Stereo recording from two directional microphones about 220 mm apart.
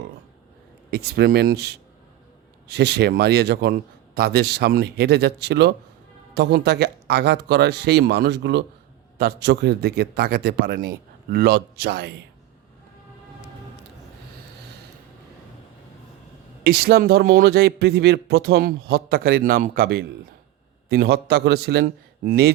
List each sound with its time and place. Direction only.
0.9 s speech: 45° right (ahead or behind)
16.6 s speech: 45° right (ahead or behind)